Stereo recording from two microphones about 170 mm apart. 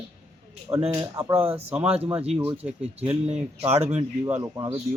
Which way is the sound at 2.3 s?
10° right (ahead or behind).